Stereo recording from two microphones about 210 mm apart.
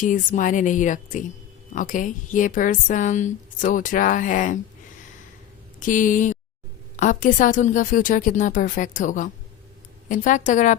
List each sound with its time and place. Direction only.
0.0 s a woman's voice: 40° left (ahead or behind)
5.8 s a woman's voice: 40° left (ahead or behind)